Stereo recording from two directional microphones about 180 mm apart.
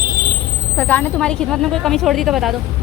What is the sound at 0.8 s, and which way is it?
Speech, 10° left (ahead or behind).